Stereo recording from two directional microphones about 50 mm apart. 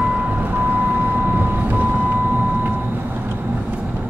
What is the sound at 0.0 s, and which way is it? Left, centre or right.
Vehicle, right.